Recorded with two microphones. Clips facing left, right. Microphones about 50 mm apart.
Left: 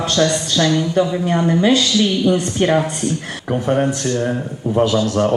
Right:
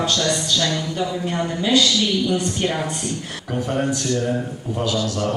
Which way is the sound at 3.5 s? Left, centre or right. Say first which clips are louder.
Left 6 dB; left.